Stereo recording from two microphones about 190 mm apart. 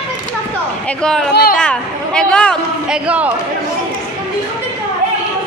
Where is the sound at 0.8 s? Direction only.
5° left (ahead or behind).